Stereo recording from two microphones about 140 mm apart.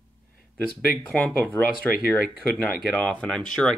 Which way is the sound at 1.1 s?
10° left (ahead or behind).